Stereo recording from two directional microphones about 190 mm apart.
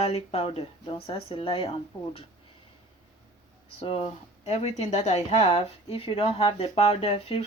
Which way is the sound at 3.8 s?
30° left (ahead or behind).